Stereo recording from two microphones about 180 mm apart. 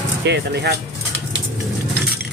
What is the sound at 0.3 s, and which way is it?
Speech, 70° right (ahead or behind).